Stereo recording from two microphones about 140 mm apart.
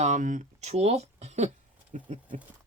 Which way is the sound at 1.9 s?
60° right (ahead or behind).